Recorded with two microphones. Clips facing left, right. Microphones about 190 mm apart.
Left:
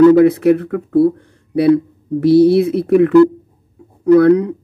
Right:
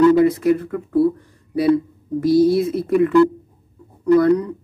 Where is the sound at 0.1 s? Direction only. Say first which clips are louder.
Left 5 dB; 65° left (ahead or behind).